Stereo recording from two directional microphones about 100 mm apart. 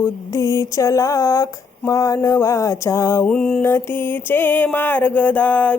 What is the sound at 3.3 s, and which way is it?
Mantra, 10° left (ahead or behind).